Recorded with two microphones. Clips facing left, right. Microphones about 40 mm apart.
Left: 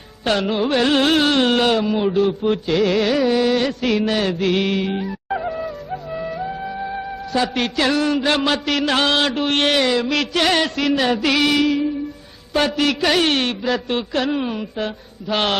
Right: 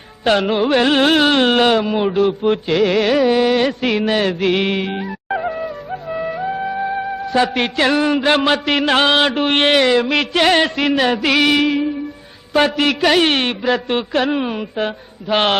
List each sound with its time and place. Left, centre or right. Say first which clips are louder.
0.3 s a man's voice: right 4 dB; right
3.2 s music: right 3 dB; right
12.5 s a man's voice: right 3 dB; right